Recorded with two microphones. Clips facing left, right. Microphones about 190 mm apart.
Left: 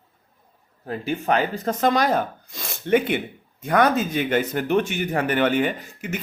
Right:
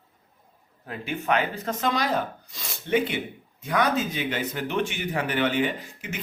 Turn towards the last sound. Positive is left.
turn(degrees=50)  # may be behind; listen again after turning